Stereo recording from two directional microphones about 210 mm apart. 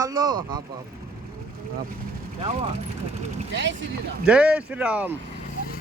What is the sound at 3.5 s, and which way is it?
Speech, 55° right (ahead or behind).